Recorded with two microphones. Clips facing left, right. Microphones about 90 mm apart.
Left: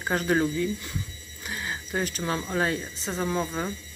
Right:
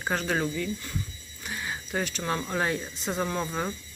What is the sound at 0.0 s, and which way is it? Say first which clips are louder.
Speech: left 3 dB; 5° left (ahead or behind).